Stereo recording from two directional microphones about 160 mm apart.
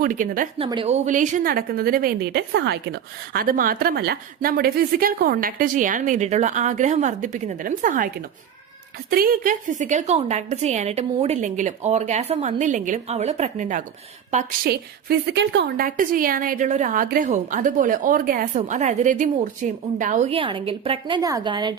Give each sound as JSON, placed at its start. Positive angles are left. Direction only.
{"t": 0.0, "sound": "a woman's voice", "side_deg": -55}
{"t": 14.6, "sound": "a woman's voice", "side_deg": -75}
{"t": 20.3, "sound": "a woman's voice", "side_deg": -35}
{"t": 21.2, "sound": "a woman's voice", "side_deg": -20}